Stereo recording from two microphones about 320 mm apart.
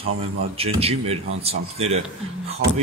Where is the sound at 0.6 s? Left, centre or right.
Centre.